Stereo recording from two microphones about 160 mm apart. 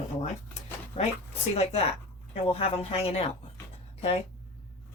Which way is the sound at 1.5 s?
40° left (ahead or behind).